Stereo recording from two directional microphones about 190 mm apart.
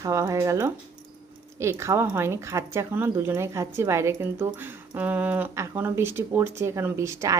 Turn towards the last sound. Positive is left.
turn(degrees=-15)  # may be behind; listen again after turning